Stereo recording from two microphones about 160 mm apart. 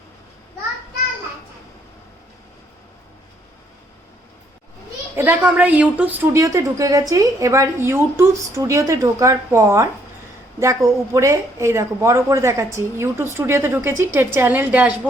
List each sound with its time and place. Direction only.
5.1 s a woman's voice: 10° right (ahead or behind)